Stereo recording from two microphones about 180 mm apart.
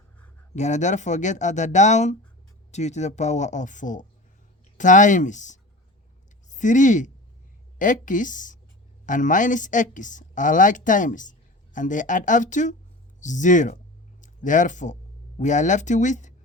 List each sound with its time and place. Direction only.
0.5 s speech: 40° left (ahead or behind)